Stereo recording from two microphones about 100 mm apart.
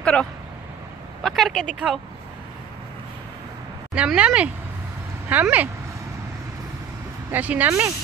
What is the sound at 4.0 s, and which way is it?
Speech, 10° right (ahead or behind).